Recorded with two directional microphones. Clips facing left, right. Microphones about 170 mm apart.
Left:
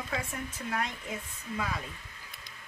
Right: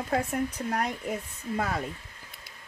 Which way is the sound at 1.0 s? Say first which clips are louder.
Right 6 dB; 45° right (ahead or behind).